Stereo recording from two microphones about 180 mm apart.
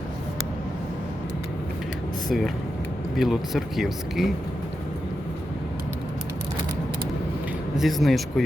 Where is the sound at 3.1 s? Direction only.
Centre (ahead or behind).